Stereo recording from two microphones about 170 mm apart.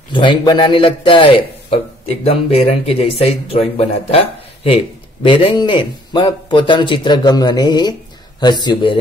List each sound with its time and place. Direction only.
0.1 s a man's voice: 30° left (ahead or behind)